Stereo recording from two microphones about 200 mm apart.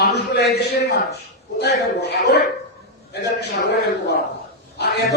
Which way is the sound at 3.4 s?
55° left (ahead or behind).